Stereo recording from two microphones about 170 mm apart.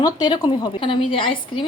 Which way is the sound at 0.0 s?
25° left (ahead or behind).